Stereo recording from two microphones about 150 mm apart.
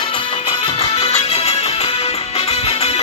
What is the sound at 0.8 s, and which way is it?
Music, 40° left (ahead or behind).